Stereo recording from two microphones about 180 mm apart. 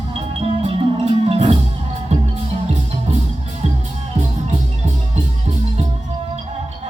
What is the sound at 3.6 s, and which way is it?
Music, 40° right (ahead or behind).